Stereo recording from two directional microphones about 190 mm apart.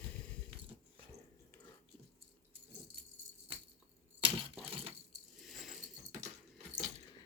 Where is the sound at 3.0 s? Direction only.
55° right (ahead or behind).